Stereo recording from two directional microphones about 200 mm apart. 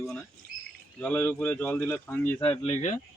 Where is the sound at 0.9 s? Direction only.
10° left (ahead or behind).